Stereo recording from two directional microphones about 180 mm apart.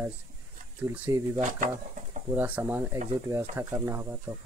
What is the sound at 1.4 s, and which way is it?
Speech, 45° right (ahead or behind).